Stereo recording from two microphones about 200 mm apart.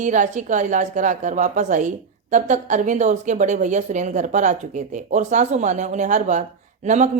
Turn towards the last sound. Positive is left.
turn(degrees=-35)  # may be behind; listen again after turning